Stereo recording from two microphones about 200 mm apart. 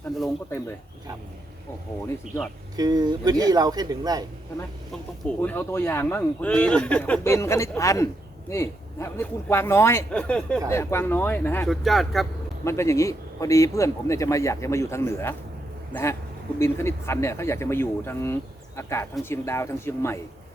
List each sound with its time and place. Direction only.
2.7 s a man's voice: 20° right (ahead or behind)
5.4 s a man's voice: 10° left (ahead or behind)
12.6 s a man's voice: 15° left (ahead or behind)